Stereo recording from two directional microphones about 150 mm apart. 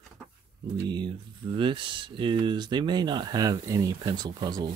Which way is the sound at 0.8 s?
30° right (ahead or behind).